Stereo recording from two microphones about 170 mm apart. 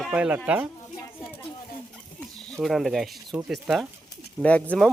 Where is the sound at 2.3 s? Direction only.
Centre (ahead or behind).